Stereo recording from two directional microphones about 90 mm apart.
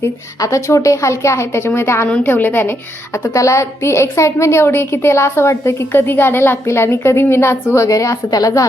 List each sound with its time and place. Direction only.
0.3 s a woman's voice: 35° left (ahead or behind)
3.2 s a woman's voice: 35° left (ahead or behind)